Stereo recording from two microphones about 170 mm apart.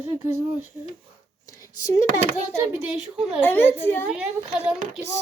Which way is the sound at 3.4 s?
10° left (ahead or behind).